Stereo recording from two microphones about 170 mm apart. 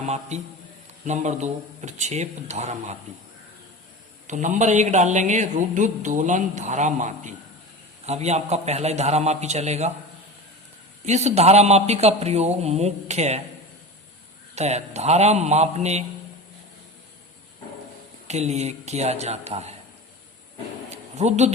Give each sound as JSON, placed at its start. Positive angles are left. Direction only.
{"t": 0.0, "sound": "a man's voice", "side_deg": -40}
{"t": 4.3, "sound": "a man's voice", "side_deg": -45}
{"t": 11.0, "sound": "a man's voice", "side_deg": -40}
{"t": 14.5, "sound": "a man's voice", "side_deg": -40}
{"t": 18.3, "sound": "a man's voice", "side_deg": -40}
{"t": 21.2, "sound": "a man's voice", "side_deg": -40}